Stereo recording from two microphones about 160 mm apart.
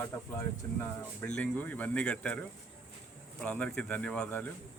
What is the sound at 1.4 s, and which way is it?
Speech, 10° left (ahead or behind).